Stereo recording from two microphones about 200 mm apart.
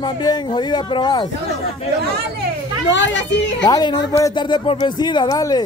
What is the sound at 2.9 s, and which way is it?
Speech, 65° left (ahead or behind).